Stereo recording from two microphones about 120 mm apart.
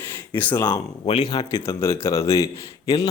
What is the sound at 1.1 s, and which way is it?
Speech, 55° left (ahead or behind).